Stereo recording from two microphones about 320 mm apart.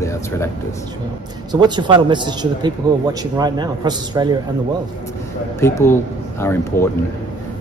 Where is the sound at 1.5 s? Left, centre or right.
Centre.